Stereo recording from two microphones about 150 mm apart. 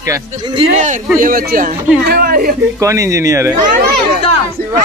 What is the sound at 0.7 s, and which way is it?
Speech, 55° right (ahead or behind).